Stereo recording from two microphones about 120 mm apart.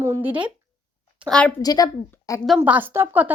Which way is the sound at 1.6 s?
30° left (ahead or behind).